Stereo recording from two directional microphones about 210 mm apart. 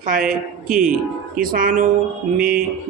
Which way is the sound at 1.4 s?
40° right (ahead or behind).